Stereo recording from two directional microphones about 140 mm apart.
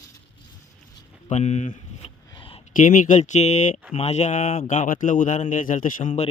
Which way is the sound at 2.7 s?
75° left (ahead or behind).